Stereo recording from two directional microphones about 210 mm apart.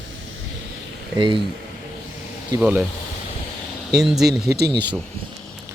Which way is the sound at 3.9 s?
Centre (ahead or behind).